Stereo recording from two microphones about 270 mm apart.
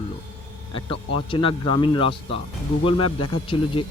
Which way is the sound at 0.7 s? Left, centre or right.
Centre.